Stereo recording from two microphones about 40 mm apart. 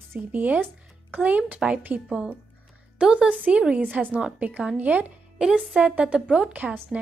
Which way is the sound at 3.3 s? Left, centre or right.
Right.